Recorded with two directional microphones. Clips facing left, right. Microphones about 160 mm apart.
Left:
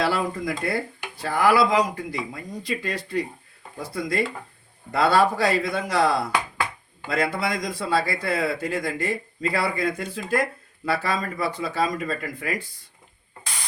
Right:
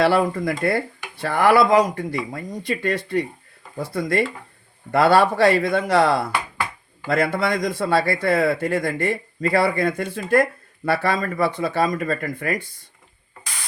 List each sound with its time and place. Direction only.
0.0 s a man's voice: 60° right (ahead or behind)